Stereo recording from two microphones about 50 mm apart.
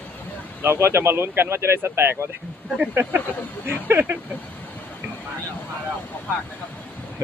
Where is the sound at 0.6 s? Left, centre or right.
Right.